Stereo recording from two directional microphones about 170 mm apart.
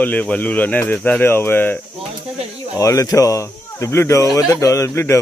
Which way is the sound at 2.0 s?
35° right (ahead or behind).